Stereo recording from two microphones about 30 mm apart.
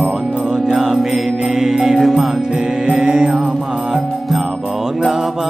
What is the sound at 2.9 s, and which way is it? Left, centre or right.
Mantra, centre.